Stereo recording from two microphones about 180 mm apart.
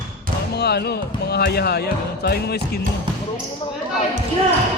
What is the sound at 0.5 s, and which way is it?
Speech, 65° left (ahead or behind).